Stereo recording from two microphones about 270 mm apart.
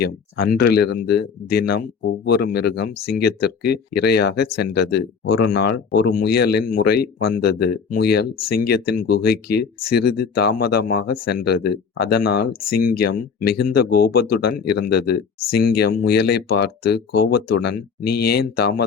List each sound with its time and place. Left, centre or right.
0.5 s speech: left